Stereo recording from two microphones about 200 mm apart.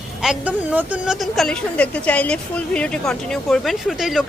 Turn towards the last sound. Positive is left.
turn(degrees=0)  # may be behind; listen again after turning